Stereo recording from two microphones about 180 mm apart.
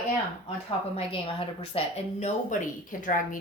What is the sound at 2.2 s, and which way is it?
A woman's voice, 45° left (ahead or behind).